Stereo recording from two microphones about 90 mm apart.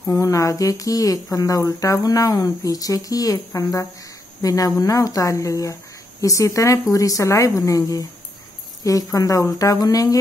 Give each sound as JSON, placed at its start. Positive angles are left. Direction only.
{"t": 0.1, "sound": "speech", "side_deg": 40}